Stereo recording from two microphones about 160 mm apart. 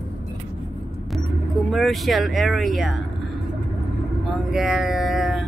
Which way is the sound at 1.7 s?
Centre (ahead or behind).